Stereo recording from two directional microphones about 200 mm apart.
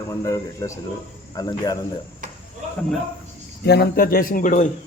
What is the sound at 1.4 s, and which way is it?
Cricket, 20° left (ahead or behind).